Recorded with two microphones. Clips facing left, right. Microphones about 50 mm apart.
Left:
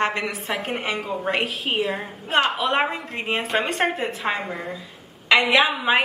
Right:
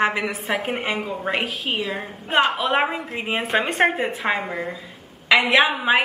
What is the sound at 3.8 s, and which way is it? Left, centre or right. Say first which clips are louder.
Speech: right 3 dB; right.